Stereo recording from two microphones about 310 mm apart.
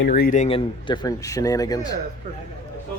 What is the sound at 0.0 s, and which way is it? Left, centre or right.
Speech, left.